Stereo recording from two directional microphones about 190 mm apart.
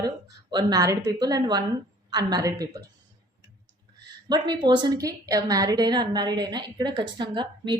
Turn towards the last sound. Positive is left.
turn(degrees=-25)  # may be behind; listen again after turning